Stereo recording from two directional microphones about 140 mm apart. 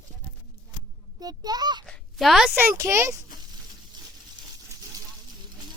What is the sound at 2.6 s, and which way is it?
Speech, 15° right (ahead or behind).